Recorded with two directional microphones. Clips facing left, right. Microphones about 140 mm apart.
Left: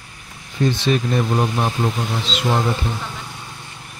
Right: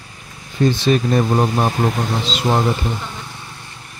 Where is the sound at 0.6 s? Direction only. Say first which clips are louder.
Right 3 dB; 40° right (ahead or behind).